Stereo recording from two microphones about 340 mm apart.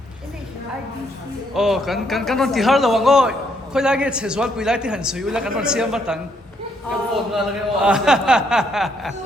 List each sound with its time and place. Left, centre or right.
1.5 s a man's voice: centre